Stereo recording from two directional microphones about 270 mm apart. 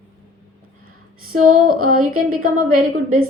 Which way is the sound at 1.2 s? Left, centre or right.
Right.